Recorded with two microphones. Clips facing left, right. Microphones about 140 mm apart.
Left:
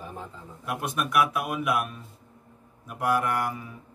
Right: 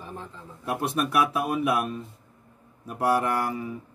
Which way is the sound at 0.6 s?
30° right (ahead or behind).